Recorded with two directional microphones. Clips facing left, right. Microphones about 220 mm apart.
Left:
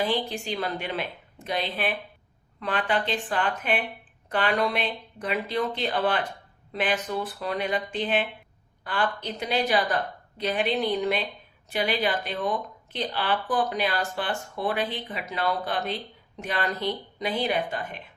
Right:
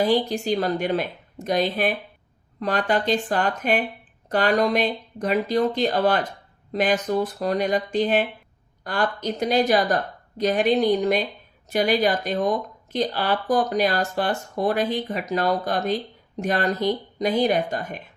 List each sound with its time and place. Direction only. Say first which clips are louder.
0.0 s speech: right 6 dB; 40° right (ahead or behind)